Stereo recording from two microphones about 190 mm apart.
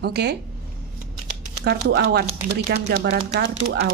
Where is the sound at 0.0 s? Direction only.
60° right (ahead or behind).